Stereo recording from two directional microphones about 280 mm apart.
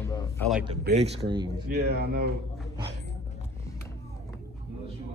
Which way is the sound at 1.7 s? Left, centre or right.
Right.